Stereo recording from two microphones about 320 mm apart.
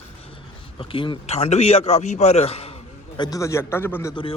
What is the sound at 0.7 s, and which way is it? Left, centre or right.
A man's voice, centre.